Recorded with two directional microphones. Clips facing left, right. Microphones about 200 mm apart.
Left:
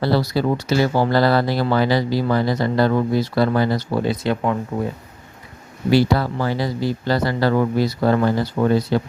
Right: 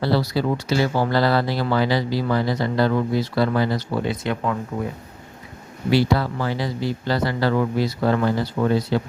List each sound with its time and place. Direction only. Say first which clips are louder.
0.0 s speech: left 2 dB; 45° left (ahead or behind)
5.9 s speech: left 2 dB; 40° left (ahead or behind)